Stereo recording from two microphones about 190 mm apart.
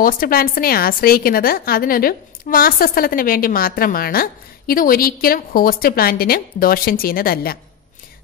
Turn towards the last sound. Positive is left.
turn(degrees=50)  # may be behind; listen again after turning